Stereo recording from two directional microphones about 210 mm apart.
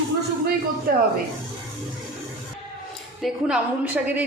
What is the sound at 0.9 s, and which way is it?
Speech, 45° right (ahead or behind).